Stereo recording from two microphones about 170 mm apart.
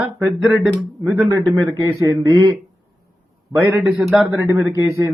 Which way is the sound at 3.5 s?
15° right (ahead or behind).